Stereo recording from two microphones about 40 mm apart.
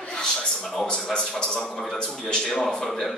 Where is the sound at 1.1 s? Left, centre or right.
Left.